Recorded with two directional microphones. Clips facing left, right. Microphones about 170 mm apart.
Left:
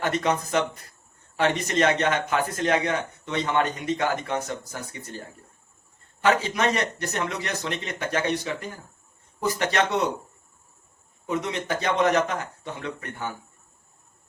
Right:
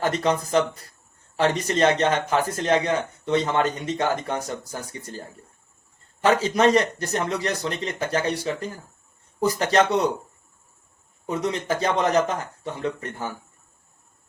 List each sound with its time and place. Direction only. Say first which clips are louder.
0.0 s a man's voice: right 2 dB; 35° right (ahead or behind)
6.2 s a man's voice: right 4 dB; 35° right (ahead or behind)
11.3 s a man's voice: right 2 dB; 35° right (ahead or behind)